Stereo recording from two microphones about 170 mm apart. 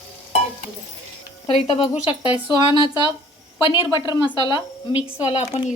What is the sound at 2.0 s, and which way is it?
Speech, 30° left (ahead or behind).